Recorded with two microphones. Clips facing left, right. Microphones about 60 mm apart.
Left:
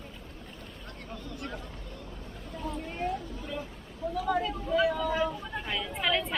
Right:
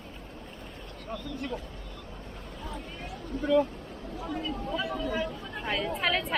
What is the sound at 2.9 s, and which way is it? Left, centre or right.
Speech, left.